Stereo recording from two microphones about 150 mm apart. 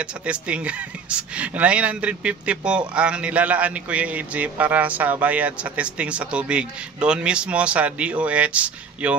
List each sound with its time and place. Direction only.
0.0 s a man's voice: 10° right (ahead or behind)